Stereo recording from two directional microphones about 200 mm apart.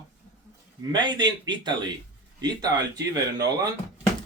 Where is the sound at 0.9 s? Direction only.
20° right (ahead or behind).